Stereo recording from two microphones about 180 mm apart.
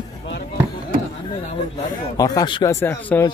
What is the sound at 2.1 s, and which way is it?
Speech, 20° left (ahead or behind).